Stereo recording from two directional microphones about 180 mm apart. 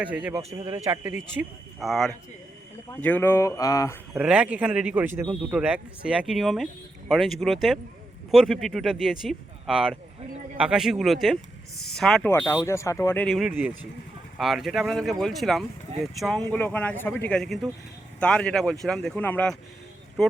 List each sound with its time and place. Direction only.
0.0 s a man's voice: 5° right (ahead or behind)
0.5 s a man's voice: 20° right (ahead or behind)
1.8 s speech: centre (ahead or behind); by 3.9 s 20° left (ahead or behind)
4.1 s a man's voice: 5° right (ahead or behind)
12.3 s speech: 15° left (ahead or behind)
13.2 s speech: centre (ahead or behind)
13.5 s a man's voice: 10° right (ahead or behind)